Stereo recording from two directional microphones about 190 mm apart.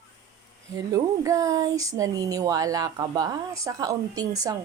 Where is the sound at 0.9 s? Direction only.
15° right (ahead or behind).